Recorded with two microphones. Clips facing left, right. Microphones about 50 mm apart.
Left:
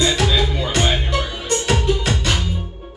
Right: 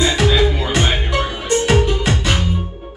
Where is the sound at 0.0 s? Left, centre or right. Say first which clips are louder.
Right 3 dB; centre.